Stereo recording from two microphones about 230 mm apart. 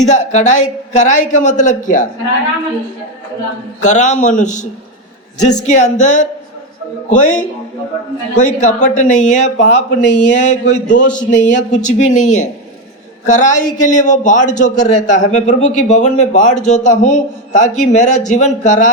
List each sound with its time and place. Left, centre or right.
0.0 s speech: left
3.8 s speech: left